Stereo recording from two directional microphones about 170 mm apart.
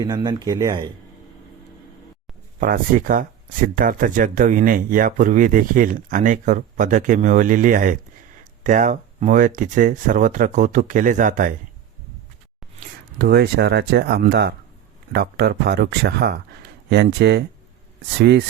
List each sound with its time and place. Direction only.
0.0 s speech: 25° right (ahead or behind)
2.6 s speech: 55° right (ahead or behind)
13.2 s speech: 65° right (ahead or behind)